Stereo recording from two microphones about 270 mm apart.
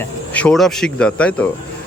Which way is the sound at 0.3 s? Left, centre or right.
Centre.